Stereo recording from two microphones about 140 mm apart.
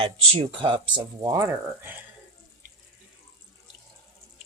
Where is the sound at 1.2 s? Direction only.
20° right (ahead or behind).